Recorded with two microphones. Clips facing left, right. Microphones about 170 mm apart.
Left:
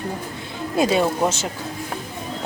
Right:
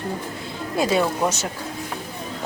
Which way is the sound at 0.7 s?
20° left (ahead or behind).